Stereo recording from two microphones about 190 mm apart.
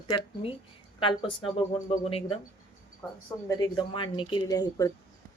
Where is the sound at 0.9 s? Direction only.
30° left (ahead or behind).